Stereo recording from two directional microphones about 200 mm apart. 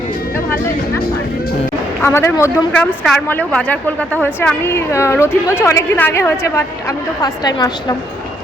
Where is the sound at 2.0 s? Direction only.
10° left (ahead or behind).